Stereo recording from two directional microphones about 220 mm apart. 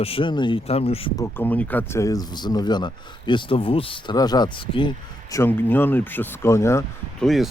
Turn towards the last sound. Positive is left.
turn(degrees=0)  # may be behind; listen again after turning